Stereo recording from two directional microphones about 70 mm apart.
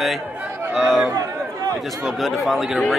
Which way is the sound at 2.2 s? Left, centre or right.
Centre.